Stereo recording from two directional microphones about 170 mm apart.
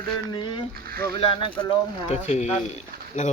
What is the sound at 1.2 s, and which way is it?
Speech, 30° left (ahead or behind).